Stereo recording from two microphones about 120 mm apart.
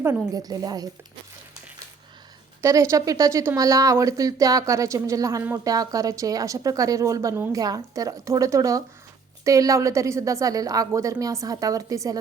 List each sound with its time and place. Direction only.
0.3 s a woman's voice: 30° right (ahead or behind)
2.6 s speech: 25° right (ahead or behind)